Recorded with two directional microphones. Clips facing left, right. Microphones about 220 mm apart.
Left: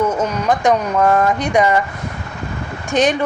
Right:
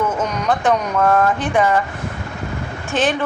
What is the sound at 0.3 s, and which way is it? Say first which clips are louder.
Speech: left 2 dB; 10° left (ahead or behind).